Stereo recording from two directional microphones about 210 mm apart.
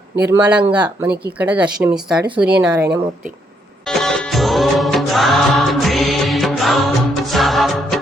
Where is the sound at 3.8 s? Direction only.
Centre (ahead or behind).